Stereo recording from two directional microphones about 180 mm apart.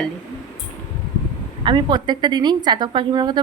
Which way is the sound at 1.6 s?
25° right (ahead or behind).